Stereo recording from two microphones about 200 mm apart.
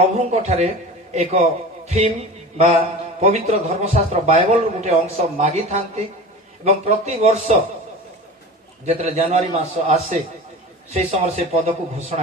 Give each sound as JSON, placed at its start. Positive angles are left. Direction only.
{"t": 0.0, "sound": "a man's voice", "side_deg": -35}
{"t": 2.5, "sound": "a man's voice", "side_deg": -35}
{"t": 8.8, "sound": "a man's voice", "side_deg": -30}